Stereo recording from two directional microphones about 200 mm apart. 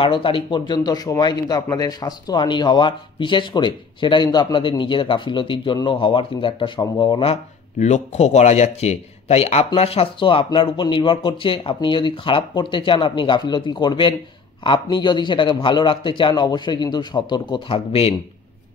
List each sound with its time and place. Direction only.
0.0 s speech: 25° left (ahead or behind)
7.8 s speech: 35° left (ahead or behind)